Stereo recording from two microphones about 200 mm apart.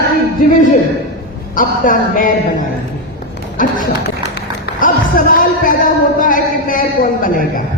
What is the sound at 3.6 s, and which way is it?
Speech, 45° left (ahead or behind).